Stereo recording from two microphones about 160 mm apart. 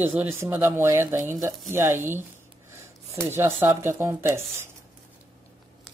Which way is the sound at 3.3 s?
15° right (ahead or behind).